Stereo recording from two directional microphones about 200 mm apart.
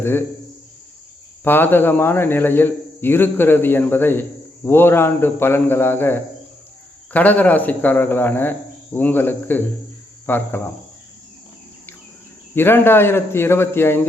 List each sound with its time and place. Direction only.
0.0 s speech: 10° left (ahead or behind)
1.5 s speech: 10° left (ahead or behind)
12.5 s speech: 10° left (ahead or behind)